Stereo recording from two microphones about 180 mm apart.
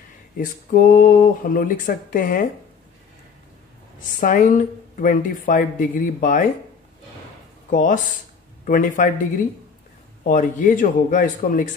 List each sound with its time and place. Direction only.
0.4 s speech: 50° left (ahead or behind)
4.2 s speech: 45° left (ahead or behind)
7.7 s speech: 45° left (ahead or behind)
10.2 s speech: 45° left (ahead or behind)